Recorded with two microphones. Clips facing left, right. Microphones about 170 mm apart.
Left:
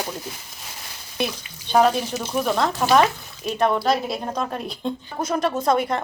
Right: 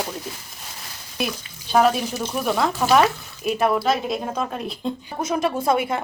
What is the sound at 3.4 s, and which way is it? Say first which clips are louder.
Speech: right 1 dB; 5° right (ahead or behind).